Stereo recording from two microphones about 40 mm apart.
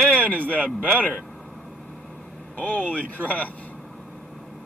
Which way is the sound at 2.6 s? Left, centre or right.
Left.